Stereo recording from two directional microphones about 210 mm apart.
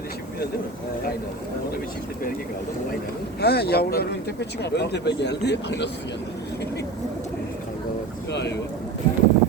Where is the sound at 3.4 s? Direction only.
50° left (ahead or behind).